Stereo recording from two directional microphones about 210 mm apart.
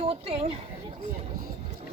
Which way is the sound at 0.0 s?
30° right (ahead or behind).